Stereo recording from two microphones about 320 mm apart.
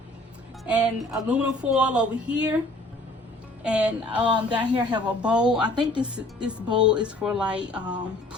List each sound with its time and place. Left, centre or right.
0.6 s speech: centre
3.6 s speech: centre